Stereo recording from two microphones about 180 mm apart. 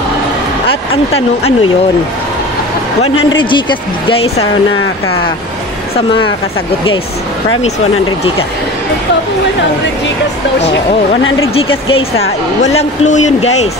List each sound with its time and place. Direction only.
0.7 s speech: 30° left (ahead or behind)
3.3 s a woman's voice: 25° left (ahead or behind)
5.9 s a woman's voice: 30° left (ahead or behind)
11.2 s speech: 90° left
11.5 s speech: 30° left (ahead or behind)